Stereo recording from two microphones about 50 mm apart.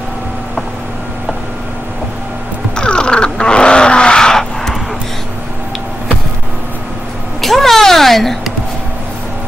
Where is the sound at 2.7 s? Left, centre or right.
Centre.